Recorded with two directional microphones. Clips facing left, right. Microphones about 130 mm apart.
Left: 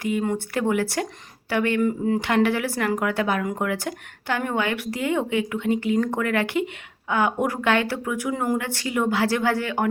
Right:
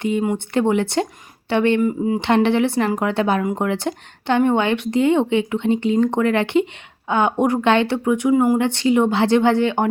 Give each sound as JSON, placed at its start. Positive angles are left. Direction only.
{"t": 0.0, "sound": "speech", "side_deg": -25}
{"t": 1.8, "sound": "speech", "side_deg": -15}
{"t": 2.2, "sound": "speech", "side_deg": -25}